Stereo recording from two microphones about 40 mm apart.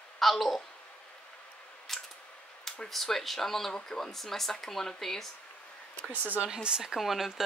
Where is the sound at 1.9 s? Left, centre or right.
Centre.